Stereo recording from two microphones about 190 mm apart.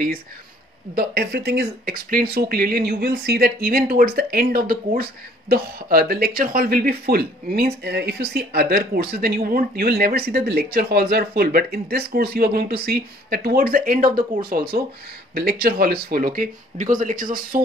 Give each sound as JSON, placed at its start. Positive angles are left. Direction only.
{"t": 0.9, "sound": "speech", "side_deg": -60}